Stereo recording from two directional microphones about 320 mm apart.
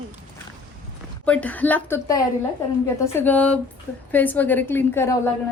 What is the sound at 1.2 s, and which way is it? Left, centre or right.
A woman's voice, centre.